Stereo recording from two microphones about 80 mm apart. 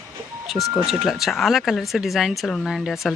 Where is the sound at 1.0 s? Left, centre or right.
Centre.